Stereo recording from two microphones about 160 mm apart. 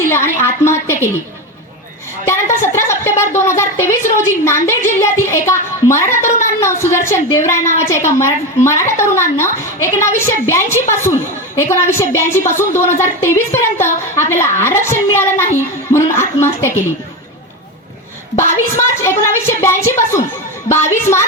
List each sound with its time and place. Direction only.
0.1 s a child's voice: 15° left (ahead or behind)
2.2 s a woman's voice: 15° left (ahead or behind)
18.8 s a child's voice: 15° left (ahead or behind)